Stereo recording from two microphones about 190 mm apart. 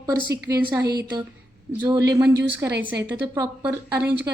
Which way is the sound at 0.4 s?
20° right (ahead or behind).